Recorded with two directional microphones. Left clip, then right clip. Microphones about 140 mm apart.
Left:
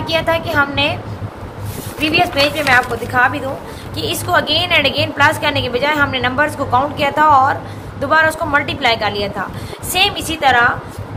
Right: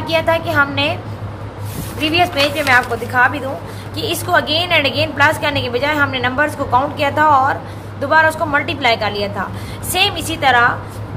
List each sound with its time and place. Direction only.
0.0 s a woman's voice: 20° right (ahead or behind)
2.0 s a woman's voice: 25° right (ahead or behind)